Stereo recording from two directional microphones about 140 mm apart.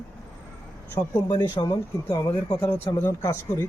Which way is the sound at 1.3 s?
30° left (ahead or behind).